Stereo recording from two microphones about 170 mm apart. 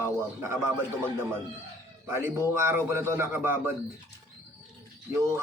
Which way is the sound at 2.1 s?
15° right (ahead or behind).